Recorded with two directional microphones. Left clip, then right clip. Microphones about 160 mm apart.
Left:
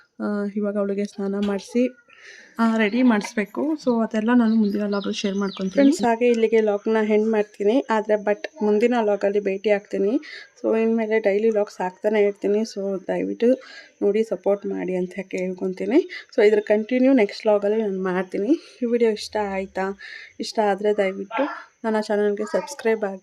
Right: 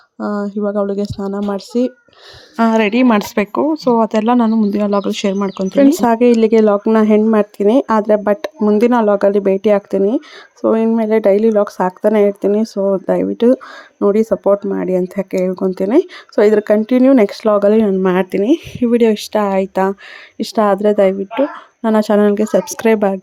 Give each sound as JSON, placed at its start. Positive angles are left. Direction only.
{"t": 0.3, "sound": "speech", "side_deg": -20}
{"t": 1.3, "sound": "speech", "side_deg": 0}
{"t": 2.6, "sound": "speech", "side_deg": -35}